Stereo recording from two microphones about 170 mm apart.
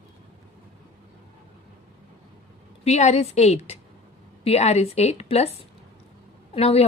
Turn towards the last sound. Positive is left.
turn(degrees=35)  # may be behind; listen again after turning